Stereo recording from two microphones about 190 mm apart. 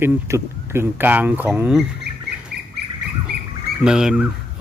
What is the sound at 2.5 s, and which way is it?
Duck, 55° right (ahead or behind).